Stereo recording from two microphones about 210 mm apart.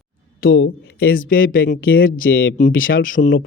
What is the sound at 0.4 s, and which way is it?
Speech, 50° left (ahead or behind).